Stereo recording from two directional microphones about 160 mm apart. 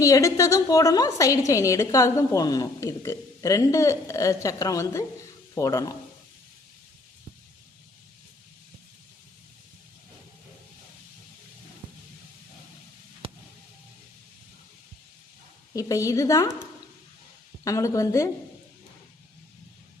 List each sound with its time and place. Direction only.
0.0 s a woman's voice: 20° left (ahead or behind)
13.2 s a sound: 35° right (ahead or behind)
15.7 s a woman's voice: 20° left (ahead or behind)